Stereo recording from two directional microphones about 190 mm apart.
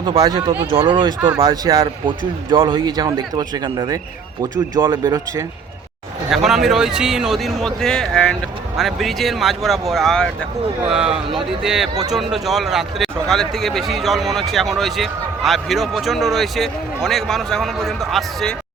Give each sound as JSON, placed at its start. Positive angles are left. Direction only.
{"t": 0.0, "sound": "speech", "side_deg": -20}
{"t": 6.3, "sound": "speech", "side_deg": 0}